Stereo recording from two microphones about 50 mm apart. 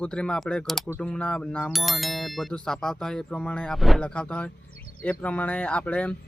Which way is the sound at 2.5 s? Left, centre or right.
Centre.